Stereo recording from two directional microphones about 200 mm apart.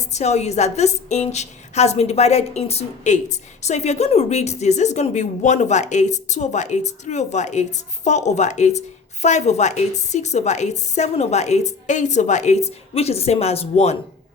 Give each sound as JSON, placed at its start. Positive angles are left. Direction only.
{"t": 0.1, "sound": "a woman's voice", "side_deg": 35}